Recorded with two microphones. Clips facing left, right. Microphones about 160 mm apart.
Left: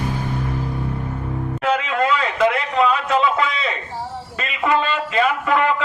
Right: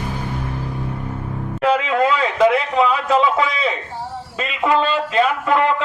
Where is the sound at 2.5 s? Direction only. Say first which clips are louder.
Right 2 dB; 5° right (ahead or behind).